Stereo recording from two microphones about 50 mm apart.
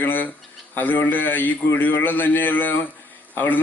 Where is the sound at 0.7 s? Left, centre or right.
Left.